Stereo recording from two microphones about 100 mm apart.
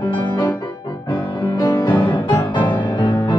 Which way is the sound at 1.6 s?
40° left (ahead or behind).